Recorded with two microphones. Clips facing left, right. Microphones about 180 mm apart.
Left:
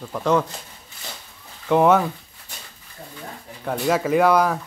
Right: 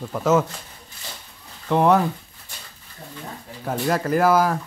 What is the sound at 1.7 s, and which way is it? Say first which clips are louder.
Speech: left 1 dB; centre (ahead or behind).